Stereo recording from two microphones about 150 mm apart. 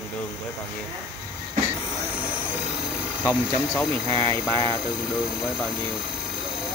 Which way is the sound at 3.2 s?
10° left (ahead or behind).